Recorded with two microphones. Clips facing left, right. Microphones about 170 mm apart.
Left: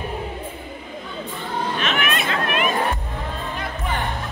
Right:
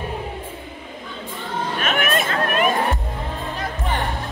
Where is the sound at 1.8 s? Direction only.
50° right (ahead or behind).